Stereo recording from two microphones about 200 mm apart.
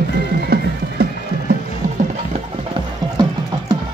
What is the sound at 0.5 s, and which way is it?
Music, 50° right (ahead or behind).